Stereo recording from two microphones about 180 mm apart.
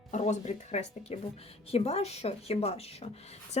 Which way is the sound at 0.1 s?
40° left (ahead or behind).